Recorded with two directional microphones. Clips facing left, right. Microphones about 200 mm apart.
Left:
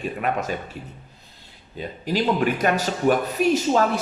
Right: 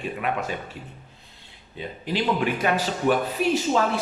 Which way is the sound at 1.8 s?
45° left (ahead or behind).